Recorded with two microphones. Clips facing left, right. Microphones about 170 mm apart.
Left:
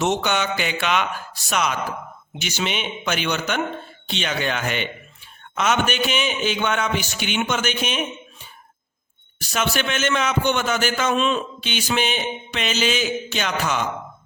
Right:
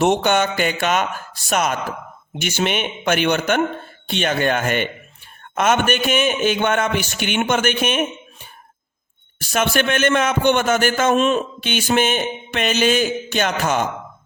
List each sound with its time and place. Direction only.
0.0 s a man's voice: 50° right (ahead or behind)
9.4 s a man's voice: 55° right (ahead or behind)